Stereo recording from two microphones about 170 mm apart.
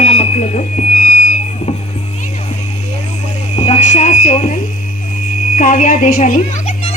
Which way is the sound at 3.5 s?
45° left (ahead or behind).